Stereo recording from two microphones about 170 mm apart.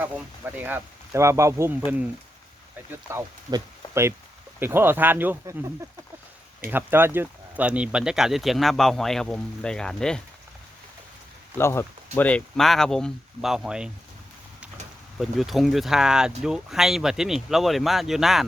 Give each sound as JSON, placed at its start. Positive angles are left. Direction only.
{"t": 0.5, "sound": "speech", "side_deg": -10}
{"t": 3.1, "sound": "speech", "side_deg": -15}
{"t": 11.5, "sound": "speech", "side_deg": 15}
{"t": 15.2, "sound": "speech", "side_deg": 0}